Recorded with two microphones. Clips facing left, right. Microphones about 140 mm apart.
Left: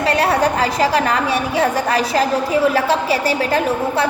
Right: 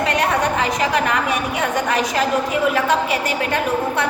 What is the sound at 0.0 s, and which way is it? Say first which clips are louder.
A woman's voice: left 3 dB; 35° left (ahead or behind).